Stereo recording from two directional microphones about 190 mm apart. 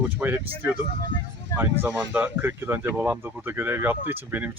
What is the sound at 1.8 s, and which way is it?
Speech, 10° right (ahead or behind).